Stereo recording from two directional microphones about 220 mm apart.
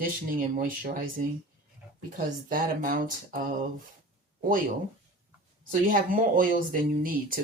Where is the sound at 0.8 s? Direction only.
40° right (ahead or behind).